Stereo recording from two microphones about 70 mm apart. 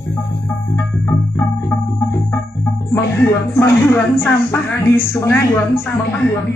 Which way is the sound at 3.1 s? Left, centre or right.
Left.